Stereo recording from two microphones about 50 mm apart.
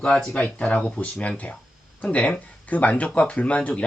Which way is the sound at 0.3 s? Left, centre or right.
Left.